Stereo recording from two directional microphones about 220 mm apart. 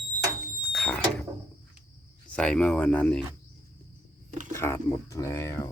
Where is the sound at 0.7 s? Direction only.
5° left (ahead or behind).